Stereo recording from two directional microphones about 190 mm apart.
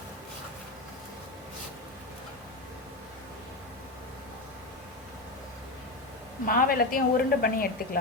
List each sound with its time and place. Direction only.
6.4 s a woman's voice: 45° left (ahead or behind)